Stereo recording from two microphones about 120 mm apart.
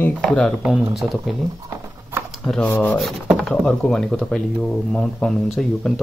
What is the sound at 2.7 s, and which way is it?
Speech, 15° left (ahead or behind).